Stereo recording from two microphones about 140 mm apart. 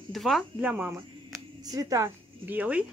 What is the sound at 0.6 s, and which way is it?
Speech, 10° right (ahead or behind).